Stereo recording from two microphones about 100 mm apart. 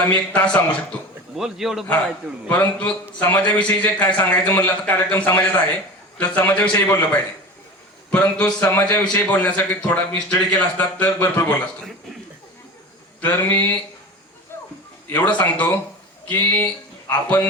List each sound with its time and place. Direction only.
0.0 s a man's voice: 10° left (ahead or behind)
1.4 s a man's voice: 5° right (ahead or behind)
2.5 s a man's voice: 10° left (ahead or behind)
13.2 s a sound: 20° left (ahead or behind)
15.1 s a man's voice: 15° left (ahead or behind)